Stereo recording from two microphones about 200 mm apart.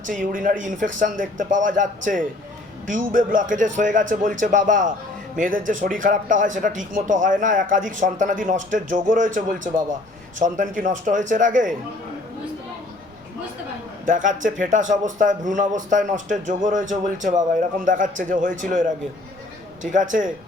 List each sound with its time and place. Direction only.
0.1 s speech: 40° right (ahead or behind)
14.0 s speech: 40° right (ahead or behind)